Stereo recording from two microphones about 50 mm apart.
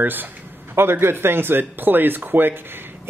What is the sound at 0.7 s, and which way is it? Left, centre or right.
Speech, right.